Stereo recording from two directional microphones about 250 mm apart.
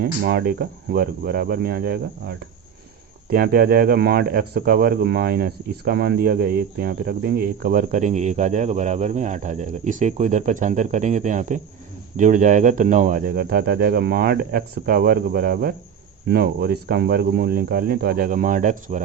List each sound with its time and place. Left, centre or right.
0.0 s speech: right